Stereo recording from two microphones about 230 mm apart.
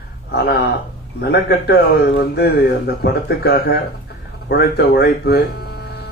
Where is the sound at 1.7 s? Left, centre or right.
Left.